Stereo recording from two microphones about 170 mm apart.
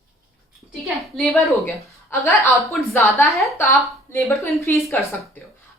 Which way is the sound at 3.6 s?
15° left (ahead or behind).